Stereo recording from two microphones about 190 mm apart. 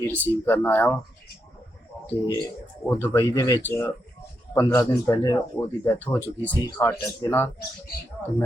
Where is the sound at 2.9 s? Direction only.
10° left (ahead or behind).